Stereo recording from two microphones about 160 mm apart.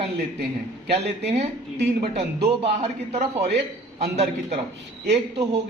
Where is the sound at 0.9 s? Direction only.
40° right (ahead or behind).